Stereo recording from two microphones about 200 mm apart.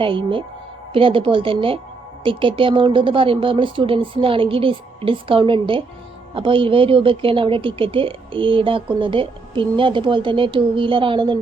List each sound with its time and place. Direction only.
0.0 s speech: 25° right (ahead or behind)